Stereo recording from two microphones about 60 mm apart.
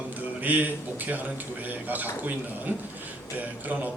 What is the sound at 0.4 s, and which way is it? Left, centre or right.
Speech, right.